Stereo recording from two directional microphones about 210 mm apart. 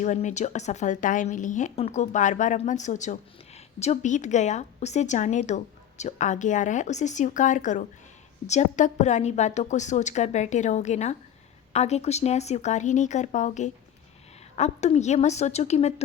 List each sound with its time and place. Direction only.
0.0 s a woman's voice: 35° left (ahead or behind)